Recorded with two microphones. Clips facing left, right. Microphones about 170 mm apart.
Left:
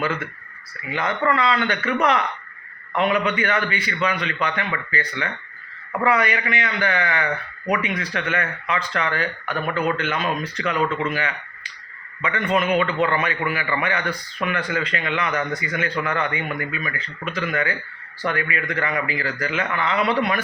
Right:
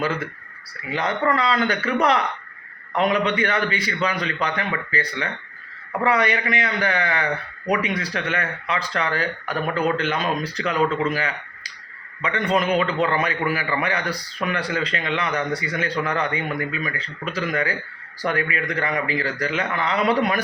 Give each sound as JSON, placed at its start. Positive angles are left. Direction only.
{"t": 0.0, "sound": "a man's voice", "side_deg": -35}